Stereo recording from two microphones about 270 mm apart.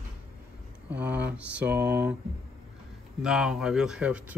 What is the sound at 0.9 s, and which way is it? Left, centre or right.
Speech, centre.